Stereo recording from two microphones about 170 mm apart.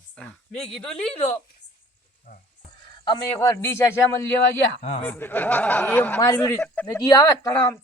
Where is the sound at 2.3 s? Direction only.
65° left (ahead or behind).